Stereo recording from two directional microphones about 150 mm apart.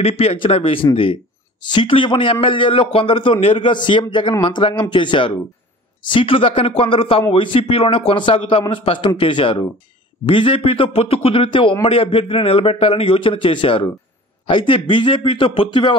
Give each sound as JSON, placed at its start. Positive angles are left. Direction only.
{"t": 0.0, "sound": "a man's voice", "side_deg": 40}